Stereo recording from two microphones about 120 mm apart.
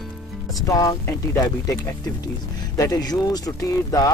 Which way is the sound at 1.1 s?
25° left (ahead or behind).